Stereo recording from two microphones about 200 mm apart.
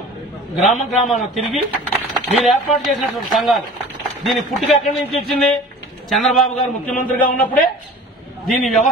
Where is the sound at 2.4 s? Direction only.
Centre (ahead or behind).